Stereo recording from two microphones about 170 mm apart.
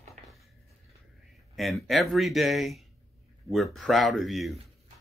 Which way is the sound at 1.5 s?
Centre (ahead or behind).